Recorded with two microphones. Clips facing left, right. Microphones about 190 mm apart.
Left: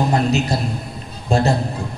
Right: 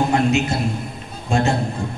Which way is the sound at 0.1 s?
35° left (ahead or behind).